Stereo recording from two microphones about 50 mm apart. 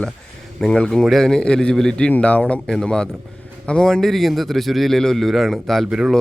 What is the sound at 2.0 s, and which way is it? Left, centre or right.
Speech, left.